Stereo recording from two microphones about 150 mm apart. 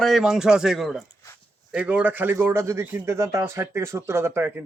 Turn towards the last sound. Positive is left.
turn(degrees=-15)  # may be behind; listen again after turning